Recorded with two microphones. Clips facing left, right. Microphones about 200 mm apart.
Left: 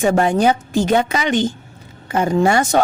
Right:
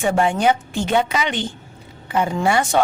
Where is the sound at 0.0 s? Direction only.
40° left (ahead or behind).